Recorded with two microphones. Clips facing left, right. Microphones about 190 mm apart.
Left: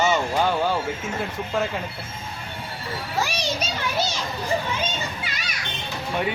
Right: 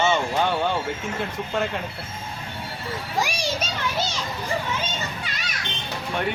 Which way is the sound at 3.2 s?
15° right (ahead or behind).